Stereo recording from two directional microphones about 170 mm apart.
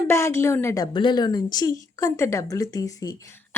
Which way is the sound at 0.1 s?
15° left (ahead or behind).